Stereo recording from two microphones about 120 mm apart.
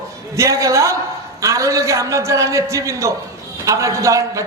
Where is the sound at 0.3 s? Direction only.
25° right (ahead or behind).